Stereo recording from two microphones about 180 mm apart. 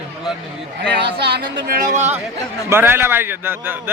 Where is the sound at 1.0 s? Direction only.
65° right (ahead or behind).